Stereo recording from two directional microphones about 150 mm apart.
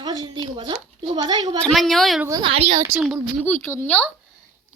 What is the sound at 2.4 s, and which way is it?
Speech, 40° right (ahead or behind).